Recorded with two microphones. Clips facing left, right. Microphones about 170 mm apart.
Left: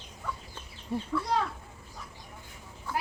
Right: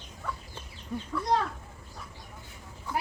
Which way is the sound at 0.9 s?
30° left (ahead or behind).